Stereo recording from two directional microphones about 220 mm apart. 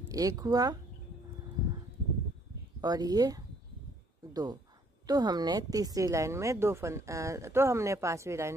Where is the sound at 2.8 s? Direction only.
15° right (ahead or behind).